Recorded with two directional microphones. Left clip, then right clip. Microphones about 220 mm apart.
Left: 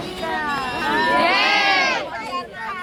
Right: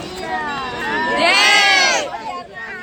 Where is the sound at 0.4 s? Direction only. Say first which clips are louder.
Even; 35° left (ahead or behind).